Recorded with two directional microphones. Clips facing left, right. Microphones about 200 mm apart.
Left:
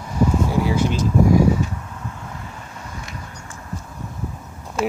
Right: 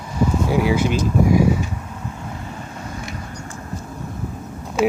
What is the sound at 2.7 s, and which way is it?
Vehicle, 35° right (ahead or behind).